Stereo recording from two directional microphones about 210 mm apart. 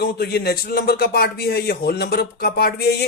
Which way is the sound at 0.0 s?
50° left (ahead or behind).